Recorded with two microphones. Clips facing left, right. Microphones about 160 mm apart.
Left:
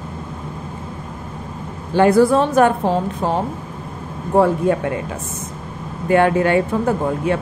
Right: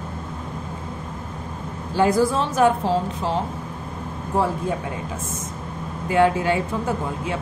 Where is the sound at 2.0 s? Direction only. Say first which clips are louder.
Left 6 dB; 65° left (ahead or behind).